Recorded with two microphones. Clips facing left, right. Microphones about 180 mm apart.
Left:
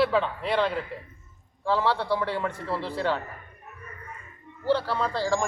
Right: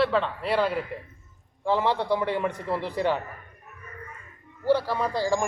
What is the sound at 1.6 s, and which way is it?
A man's voice, 20° right (ahead or behind).